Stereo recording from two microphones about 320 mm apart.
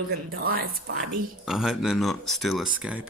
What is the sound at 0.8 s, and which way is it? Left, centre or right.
Speech, right.